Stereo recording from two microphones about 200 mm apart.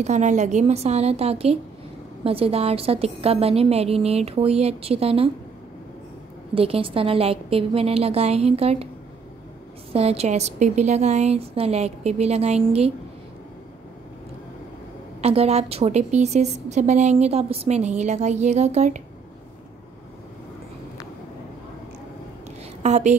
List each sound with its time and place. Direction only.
0.0 s a woman's voice: 35° right (ahead or behind)
6.5 s a woman's voice: 30° right (ahead or behind)
9.9 s a woman's voice: 30° right (ahead or behind)
15.2 s a woman's voice: 30° right (ahead or behind)
22.8 s speech: 35° right (ahead or behind)